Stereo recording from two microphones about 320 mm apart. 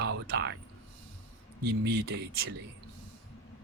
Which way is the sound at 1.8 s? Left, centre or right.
Right.